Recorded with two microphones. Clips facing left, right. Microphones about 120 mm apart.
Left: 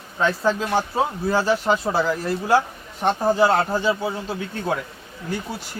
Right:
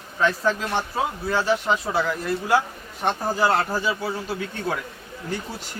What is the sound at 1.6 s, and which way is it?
Speech, 30° left (ahead or behind).